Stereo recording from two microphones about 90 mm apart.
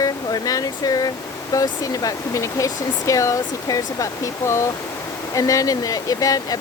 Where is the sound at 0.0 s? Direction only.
45° left (ahead or behind).